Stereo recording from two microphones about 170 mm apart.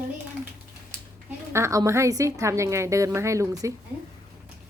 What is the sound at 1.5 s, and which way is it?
A woman's voice, 15° right (ahead or behind).